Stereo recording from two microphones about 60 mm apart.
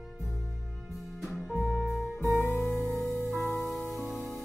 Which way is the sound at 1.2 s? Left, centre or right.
Centre.